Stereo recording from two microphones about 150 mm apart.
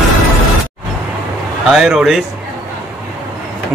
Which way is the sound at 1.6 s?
Centre (ahead or behind).